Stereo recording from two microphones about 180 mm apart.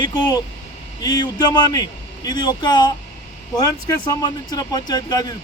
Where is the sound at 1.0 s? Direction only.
25° left (ahead or behind).